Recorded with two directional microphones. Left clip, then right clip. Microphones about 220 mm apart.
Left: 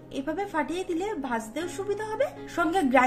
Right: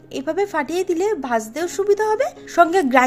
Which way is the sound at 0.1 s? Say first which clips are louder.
Right 9 dB; 40° right (ahead or behind).